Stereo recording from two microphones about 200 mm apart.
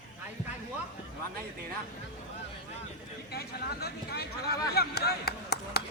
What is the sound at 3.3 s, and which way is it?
Speech, 50° left (ahead or behind).